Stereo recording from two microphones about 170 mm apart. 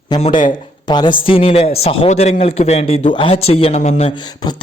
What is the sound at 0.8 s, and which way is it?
A woman's voice, 25° left (ahead or behind).